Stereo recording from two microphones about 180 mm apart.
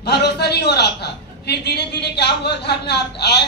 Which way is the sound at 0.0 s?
65° left (ahead or behind).